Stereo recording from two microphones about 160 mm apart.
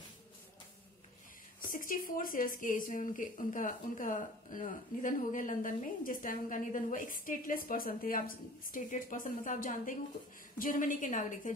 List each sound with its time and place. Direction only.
1.6 s speech: 60° left (ahead or behind)